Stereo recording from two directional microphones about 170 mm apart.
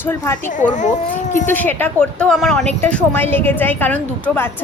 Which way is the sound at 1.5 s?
10° left (ahead or behind).